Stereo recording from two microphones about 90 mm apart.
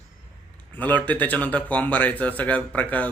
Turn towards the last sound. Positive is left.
turn(degrees=15)  # may be behind; listen again after turning